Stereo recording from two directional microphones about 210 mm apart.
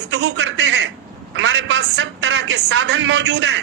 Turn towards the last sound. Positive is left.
turn(degrees=-55)  # may be behind; listen again after turning